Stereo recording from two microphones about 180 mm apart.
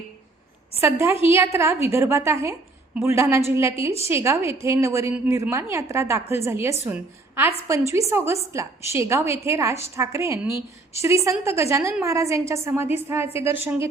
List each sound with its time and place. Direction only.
0.8 s a woman's voice: 15° right (ahead or behind)